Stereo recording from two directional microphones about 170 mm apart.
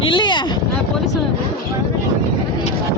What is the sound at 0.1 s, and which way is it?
Vehicle, 25° left (ahead or behind).